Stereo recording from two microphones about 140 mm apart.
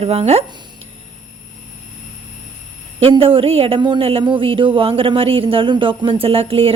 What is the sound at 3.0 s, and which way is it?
A woman's voice, 40° right (ahead or behind).